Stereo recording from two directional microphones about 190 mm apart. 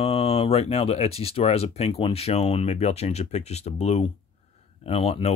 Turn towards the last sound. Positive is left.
turn(degrees=35)  # may be behind; listen again after turning